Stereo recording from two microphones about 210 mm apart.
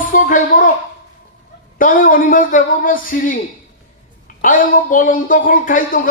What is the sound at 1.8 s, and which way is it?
Speech, 40° left (ahead or behind).